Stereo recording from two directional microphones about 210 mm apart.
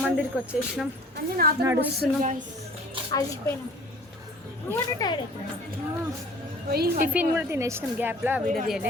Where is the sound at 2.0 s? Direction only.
35° right (ahead or behind).